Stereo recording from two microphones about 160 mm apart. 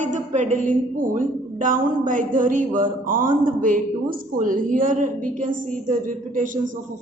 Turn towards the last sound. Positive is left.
turn(degrees=-55)  # may be behind; listen again after turning